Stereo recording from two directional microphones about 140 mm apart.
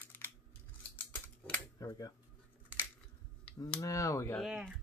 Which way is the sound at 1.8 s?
25° left (ahead or behind).